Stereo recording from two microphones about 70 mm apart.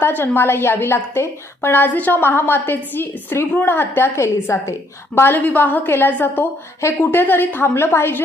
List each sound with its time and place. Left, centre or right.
0.0 s a woman's voice: left
5.1 s a woman's voice: left